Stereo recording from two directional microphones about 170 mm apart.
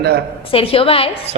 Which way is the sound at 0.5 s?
35° left (ahead or behind).